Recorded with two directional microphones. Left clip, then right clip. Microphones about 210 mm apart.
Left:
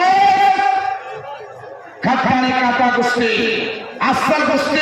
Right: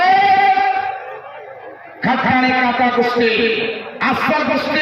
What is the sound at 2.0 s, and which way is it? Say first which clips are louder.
A man's voice: right 1 dB; 40° right (ahead or behind).